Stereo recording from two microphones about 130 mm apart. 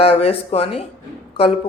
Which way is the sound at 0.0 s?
50° left (ahead or behind).